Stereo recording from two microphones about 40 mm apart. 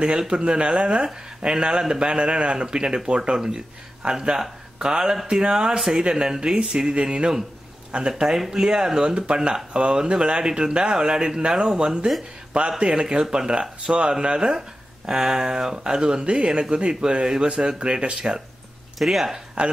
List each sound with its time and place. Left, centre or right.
0.0 s speech: centre
5.8 s speech: centre
6.0 s speech: right
8.1 s speech: centre
13.6 s speech: right
18.9 s speech: centre